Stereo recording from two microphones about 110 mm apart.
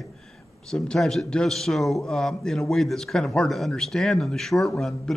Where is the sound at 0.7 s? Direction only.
5° left (ahead or behind).